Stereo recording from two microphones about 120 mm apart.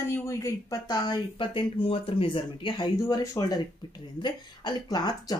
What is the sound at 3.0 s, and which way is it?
Speech, 25° left (ahead or behind).